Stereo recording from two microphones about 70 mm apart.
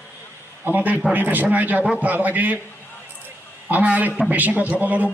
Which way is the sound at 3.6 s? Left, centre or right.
Centre.